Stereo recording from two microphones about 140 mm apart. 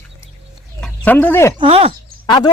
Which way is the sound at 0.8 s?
10° left (ahead or behind).